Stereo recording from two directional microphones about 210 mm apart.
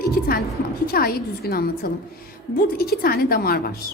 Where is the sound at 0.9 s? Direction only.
45° left (ahead or behind).